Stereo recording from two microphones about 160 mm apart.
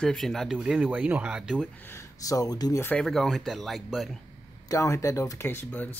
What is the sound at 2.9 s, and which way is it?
Speech, 5° left (ahead or behind).